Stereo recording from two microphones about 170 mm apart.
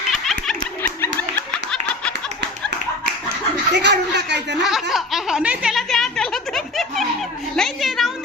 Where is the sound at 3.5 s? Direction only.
90° right.